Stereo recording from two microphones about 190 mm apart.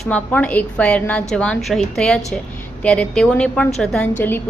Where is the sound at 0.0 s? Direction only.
5° left (ahead or behind).